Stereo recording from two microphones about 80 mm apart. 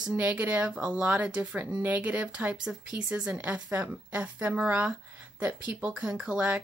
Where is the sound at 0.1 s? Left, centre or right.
Right.